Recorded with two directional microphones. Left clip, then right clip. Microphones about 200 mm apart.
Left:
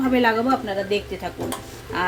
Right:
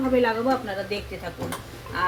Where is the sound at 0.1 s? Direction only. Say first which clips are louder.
Left 2 dB; 60° left (ahead or behind).